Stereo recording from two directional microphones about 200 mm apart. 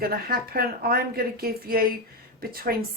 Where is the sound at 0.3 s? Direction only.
50° right (ahead or behind).